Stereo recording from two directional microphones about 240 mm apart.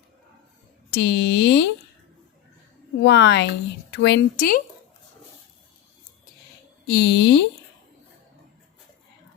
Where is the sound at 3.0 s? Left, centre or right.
Left.